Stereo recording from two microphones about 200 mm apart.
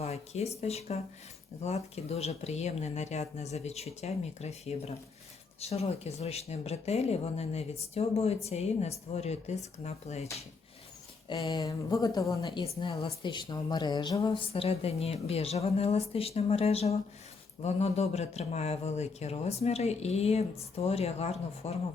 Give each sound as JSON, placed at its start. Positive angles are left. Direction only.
{"t": 0.0, "sound": "speech", "side_deg": 30}
{"t": 11.3, "sound": "speech", "side_deg": 20}